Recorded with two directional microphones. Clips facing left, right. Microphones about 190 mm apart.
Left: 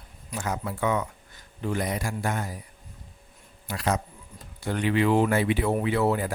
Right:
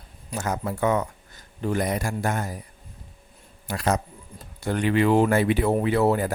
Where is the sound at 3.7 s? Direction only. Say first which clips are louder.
Right 3 dB; 45° right (ahead or behind).